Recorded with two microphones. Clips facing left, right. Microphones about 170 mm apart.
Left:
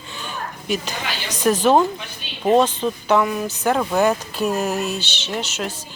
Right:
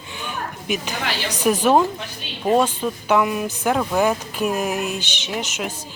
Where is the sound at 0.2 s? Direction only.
15° right (ahead or behind).